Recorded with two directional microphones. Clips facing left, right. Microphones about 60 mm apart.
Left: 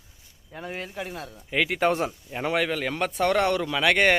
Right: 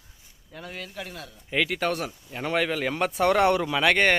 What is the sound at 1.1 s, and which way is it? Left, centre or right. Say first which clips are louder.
Speech: left 4 dB; left.